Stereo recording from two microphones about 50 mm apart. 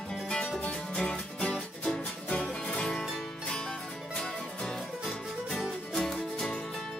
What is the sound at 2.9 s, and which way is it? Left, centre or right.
Music, centre.